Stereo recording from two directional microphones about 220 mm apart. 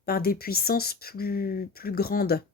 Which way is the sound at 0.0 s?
45° left (ahead or behind).